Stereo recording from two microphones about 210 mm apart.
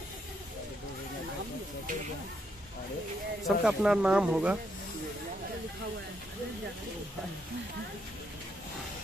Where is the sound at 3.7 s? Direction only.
5° right (ahead or behind).